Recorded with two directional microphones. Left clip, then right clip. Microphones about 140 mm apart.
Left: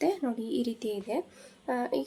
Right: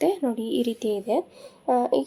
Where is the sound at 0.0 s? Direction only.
20° right (ahead or behind).